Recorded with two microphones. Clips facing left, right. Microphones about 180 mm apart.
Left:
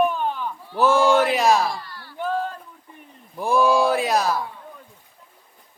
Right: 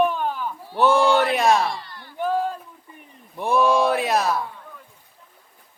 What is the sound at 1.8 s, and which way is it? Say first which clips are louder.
Chop: right 2 dB; 20° right (ahead or behind).